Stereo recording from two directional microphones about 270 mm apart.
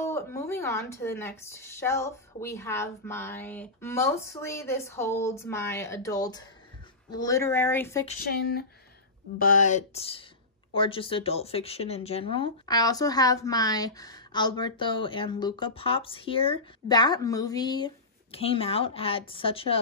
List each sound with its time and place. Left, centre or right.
0.0 s a woman's voice: centre
8.2 s speech: left